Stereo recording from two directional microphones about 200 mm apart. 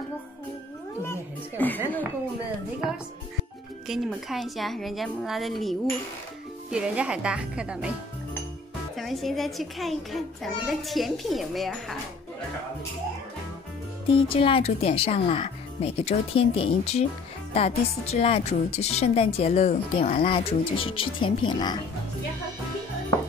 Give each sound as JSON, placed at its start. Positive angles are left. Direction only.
{"t": 1.0, "sound": "music", "side_deg": 10}
{"t": 3.8, "sound": "a child's voice", "side_deg": 0}
{"t": 8.9, "sound": "a child's voice", "side_deg": 0}
{"t": 14.1, "sound": "a woman's voice", "side_deg": 25}